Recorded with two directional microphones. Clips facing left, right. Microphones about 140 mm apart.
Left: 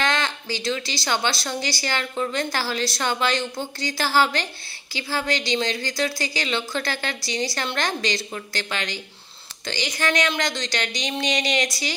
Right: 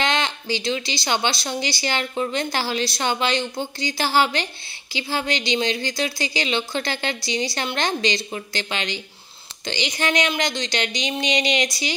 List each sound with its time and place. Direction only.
0.0 s speech: 20° right (ahead or behind)